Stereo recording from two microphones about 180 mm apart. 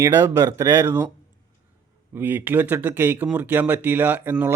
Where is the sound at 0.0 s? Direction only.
15° right (ahead or behind).